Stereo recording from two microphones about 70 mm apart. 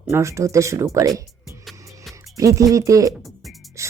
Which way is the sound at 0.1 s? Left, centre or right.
Right.